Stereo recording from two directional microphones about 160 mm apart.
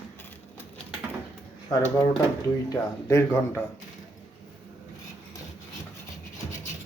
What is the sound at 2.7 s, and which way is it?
Speech, 20° left (ahead or behind).